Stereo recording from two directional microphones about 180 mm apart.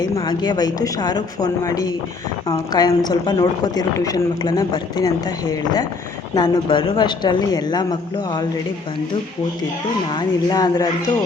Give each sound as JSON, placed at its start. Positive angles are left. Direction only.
{"t": 0.0, "sound": "a woman's voice", "side_deg": 25}
{"t": 10.1, "sound": "a woman's voice", "side_deg": 25}